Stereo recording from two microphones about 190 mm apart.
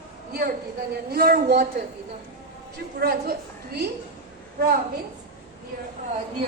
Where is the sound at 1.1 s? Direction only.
55° right (ahead or behind).